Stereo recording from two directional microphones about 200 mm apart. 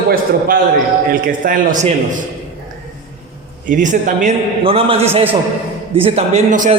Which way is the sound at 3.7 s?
40° right (ahead or behind).